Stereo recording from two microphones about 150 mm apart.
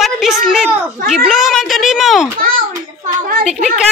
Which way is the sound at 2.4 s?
65° right (ahead or behind).